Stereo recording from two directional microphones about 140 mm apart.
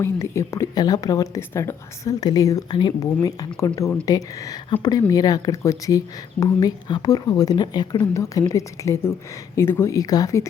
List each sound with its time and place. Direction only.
0.0 s a woman's voice: 20° left (ahead or behind)